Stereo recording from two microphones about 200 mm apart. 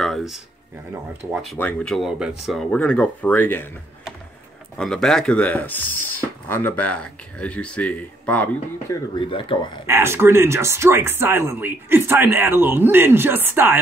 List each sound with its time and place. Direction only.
0.0 s a sound: centre (ahead or behind)
1.3 s speech: centre (ahead or behind)
4.7 s speech: centre (ahead or behind)
9.1 s speech: 25° left (ahead or behind)
9.8 s speech: 10° right (ahead or behind)